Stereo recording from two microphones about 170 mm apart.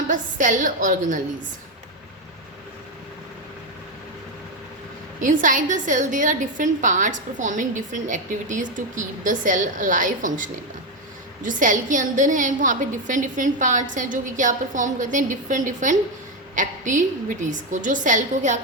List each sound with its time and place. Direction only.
0.1 s a woman's voice: 50° right (ahead or behind)
5.2 s a woman's voice: 50° right (ahead or behind)